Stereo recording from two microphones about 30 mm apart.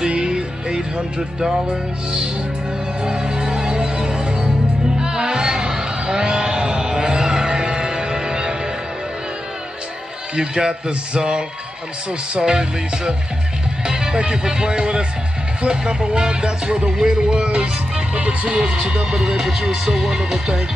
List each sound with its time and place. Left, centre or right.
0.0 s music: right
1.4 s speech: right
3.0 s music: right
10.3 s speech: right
13.8 s music: right
14.1 s speech: right
18.5 s speech: right
20.0 s music: centre